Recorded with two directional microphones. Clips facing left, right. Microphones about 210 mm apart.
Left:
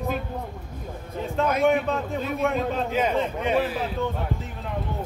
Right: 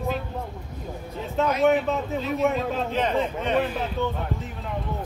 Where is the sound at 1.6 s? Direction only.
Centre (ahead or behind).